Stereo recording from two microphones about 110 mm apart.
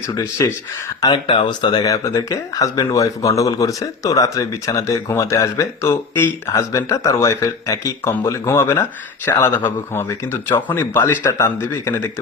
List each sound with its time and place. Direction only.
0.1 s speech: 30° left (ahead or behind)
1.0 s speech: 45° left (ahead or behind); by 12.0 s 20° left (ahead or behind)